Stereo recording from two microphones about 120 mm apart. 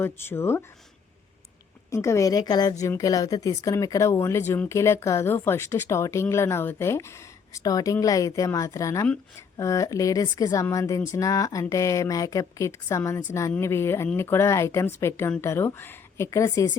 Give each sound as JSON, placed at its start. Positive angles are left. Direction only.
{"t": 0.0, "sound": "speech", "side_deg": 20}
{"t": 1.9, "sound": "speech", "side_deg": 25}